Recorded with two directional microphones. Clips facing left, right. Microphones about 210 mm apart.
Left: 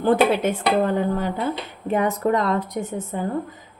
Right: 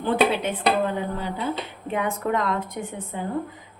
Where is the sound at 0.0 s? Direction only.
45° left (ahead or behind).